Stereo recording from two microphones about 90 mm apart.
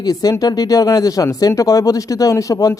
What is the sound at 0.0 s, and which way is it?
Speech, 45° left (ahead or behind).